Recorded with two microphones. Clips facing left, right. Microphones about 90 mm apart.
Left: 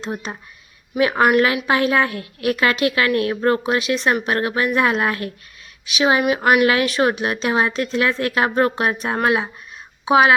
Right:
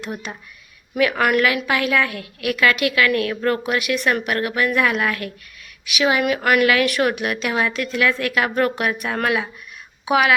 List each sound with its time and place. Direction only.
0.0 s a woman's voice: 30° left (ahead or behind)